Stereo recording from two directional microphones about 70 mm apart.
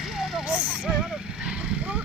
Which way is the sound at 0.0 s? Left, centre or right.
Centre.